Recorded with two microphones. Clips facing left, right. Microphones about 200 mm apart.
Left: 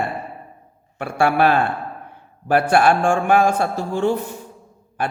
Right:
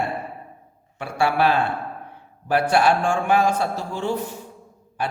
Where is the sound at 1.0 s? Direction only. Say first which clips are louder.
Left 3 dB; 55° left (ahead or behind).